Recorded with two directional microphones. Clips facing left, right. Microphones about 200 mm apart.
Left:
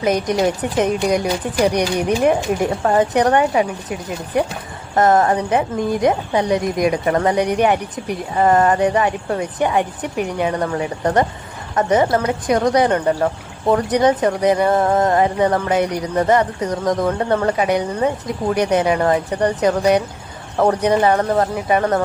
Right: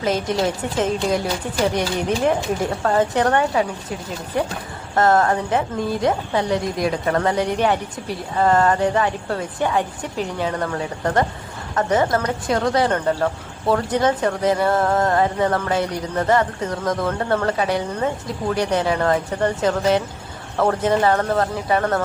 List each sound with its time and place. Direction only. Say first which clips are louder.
0.0 s speech: left 3 dB; 20° left (ahead or behind)
4.9 s a woman's voice: left 2 dB; 20° left (ahead or behind)